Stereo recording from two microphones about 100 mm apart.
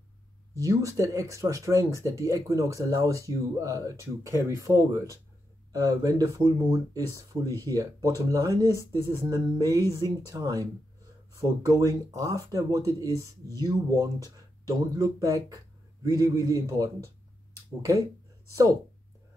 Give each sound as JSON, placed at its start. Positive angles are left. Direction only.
{"t": 0.6, "sound": "speech", "side_deg": -35}